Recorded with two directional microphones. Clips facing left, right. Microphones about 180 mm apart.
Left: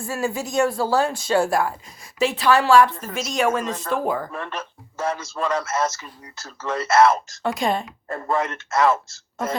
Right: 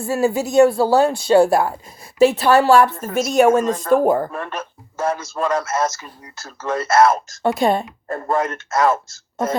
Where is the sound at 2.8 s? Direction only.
50° right (ahead or behind).